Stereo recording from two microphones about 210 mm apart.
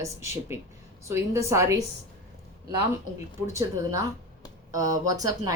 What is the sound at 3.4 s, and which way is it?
A woman's voice, 15° right (ahead or behind).